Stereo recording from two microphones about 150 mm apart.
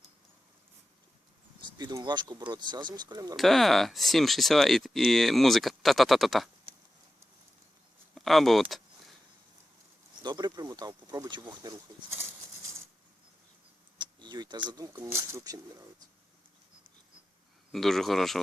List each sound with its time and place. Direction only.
1.8 s speech: 30° right (ahead or behind)
3.3 s speech: centre (ahead or behind)
8.1 s speech: centre (ahead or behind)
10.2 s speech: 25° right (ahead or behind)
14.0 s a sound: 30° right (ahead or behind)
14.9 s speech: 15° right (ahead or behind)
17.7 s speech: centre (ahead or behind)